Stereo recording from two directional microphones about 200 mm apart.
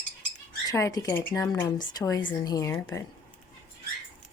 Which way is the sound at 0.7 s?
15° left (ahead or behind).